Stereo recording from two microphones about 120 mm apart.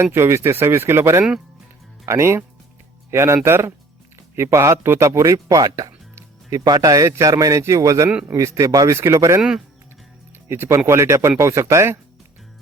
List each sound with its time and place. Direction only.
0.0 s speech: 20° right (ahead or behind)
9.4 s speech: 5° right (ahead or behind)
10.5 s speech: 20° right (ahead or behind)